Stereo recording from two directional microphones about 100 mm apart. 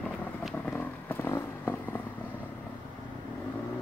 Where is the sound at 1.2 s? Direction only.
25° left (ahead or behind).